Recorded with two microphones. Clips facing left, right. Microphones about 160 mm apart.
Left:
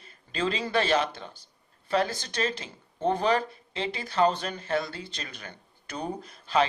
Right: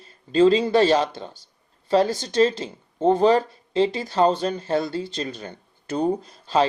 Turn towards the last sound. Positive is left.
turn(degrees=-30)  # may be behind; listen again after turning